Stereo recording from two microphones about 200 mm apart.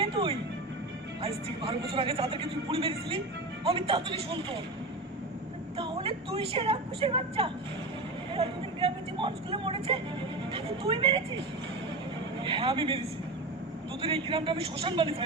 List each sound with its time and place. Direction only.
0.0 s music: 25° right (ahead or behind)
1.9 s a woman's voice: 25° right (ahead or behind)
5.7 s a woman's voice: 25° right (ahead or behind)
12.4 s a woman's voice: 25° right (ahead or behind)
14.0 s a woman's voice: 25° right (ahead or behind)